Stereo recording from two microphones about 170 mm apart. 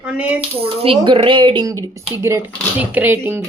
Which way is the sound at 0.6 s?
35° right (ahead or behind).